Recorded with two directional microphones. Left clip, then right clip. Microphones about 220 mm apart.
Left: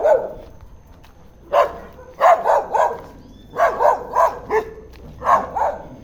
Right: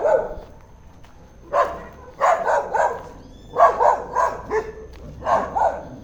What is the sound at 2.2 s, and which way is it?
Dog, 40° left (ahead or behind).